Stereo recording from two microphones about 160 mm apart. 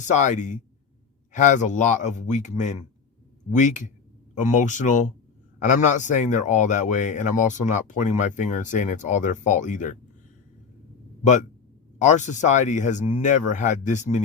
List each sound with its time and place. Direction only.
0.0 s speech: 50° left (ahead or behind)
11.2 s speech: 50° left (ahead or behind)